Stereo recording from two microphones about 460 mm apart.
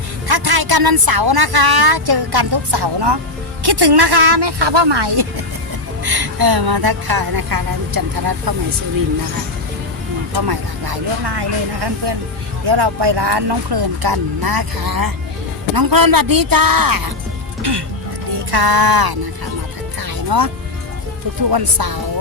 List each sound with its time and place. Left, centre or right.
0.3 s speech: right
10.3 s speech: right
17.6 s speech: right
20.0 s music: right
21.5 s speech: right